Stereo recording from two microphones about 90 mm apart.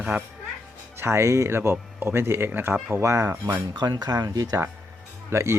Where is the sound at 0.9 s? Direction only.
30° right (ahead or behind).